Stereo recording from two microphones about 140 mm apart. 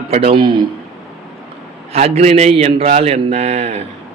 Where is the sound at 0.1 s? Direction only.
45° right (ahead or behind).